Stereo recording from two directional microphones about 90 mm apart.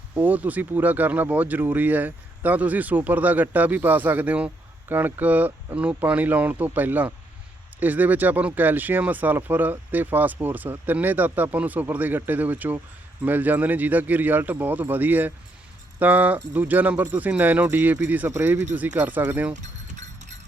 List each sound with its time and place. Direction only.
0.2 s speech: 20° right (ahead or behind)
18.3 s speech: 30° right (ahead or behind)